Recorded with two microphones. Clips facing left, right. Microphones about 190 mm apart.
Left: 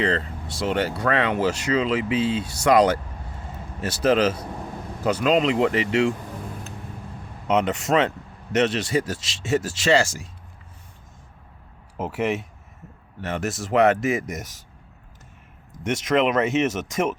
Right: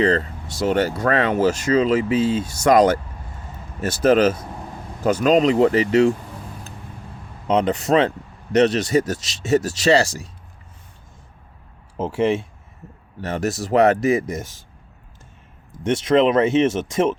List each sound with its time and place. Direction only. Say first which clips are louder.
0.0 s speech: right 5 dB; 45° right (ahead or behind)
7.4 s speech: right 3 dB; 35° right (ahead or behind)
11.9 s speech: right 5 dB; 30° right (ahead or behind)
15.8 s speech: right 5 dB; 30° right (ahead or behind)